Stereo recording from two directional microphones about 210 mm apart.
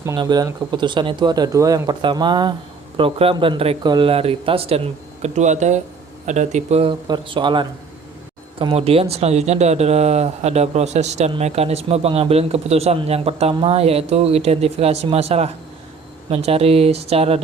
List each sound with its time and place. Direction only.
0.0 s speech: 15° right (ahead or behind)